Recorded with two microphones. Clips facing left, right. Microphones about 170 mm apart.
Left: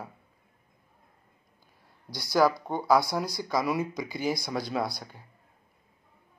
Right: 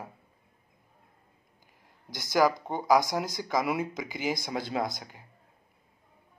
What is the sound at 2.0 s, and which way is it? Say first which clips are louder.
Speech: left 1 dB; 20° right (ahead or behind).